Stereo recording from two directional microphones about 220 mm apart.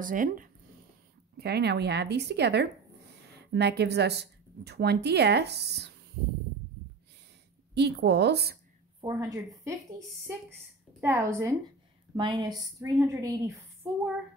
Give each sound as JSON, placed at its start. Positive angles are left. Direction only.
{"t": 0.0, "sound": "a woman's voice", "side_deg": -40}
{"t": 7.7, "sound": "a woman's voice", "side_deg": -50}
{"t": 9.0, "sound": "a woman's voice", "side_deg": -15}